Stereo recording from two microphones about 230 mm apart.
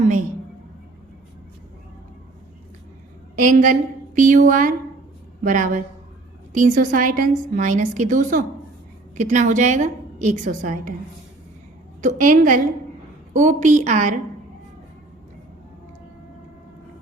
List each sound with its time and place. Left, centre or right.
3.3 s a woman's voice: right
12.0 s a woman's voice: right